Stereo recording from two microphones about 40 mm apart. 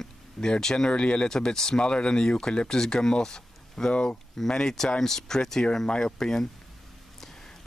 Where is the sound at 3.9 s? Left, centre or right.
Left.